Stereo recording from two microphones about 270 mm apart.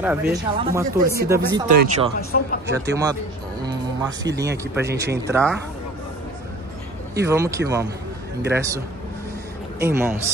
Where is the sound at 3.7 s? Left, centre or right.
Centre.